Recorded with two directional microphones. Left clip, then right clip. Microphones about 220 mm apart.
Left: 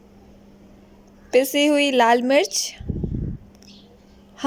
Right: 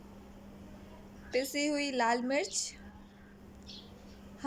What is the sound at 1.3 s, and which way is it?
Speech, 35° left (ahead or behind).